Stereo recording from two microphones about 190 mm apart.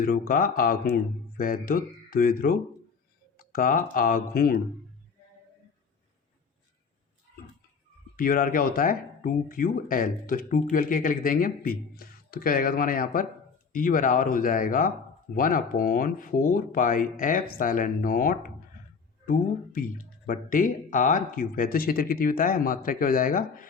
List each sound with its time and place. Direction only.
0.0 s speech: 50° left (ahead or behind)
8.1 s speech: 50° left (ahead or behind)